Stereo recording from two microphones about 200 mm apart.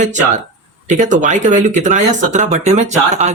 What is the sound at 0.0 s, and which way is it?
Speech, 40° right (ahead or behind).